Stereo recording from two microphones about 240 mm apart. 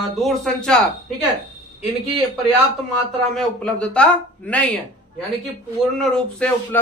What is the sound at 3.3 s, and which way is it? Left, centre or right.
Speech, centre.